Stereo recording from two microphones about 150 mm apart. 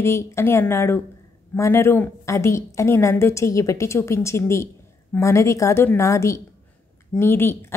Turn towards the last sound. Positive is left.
turn(degrees=15)  # may be behind; listen again after turning